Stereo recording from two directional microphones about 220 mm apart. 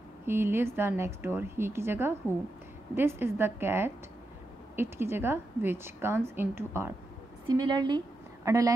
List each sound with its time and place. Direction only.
0.3 s a woman's voice: 10° right (ahead or behind)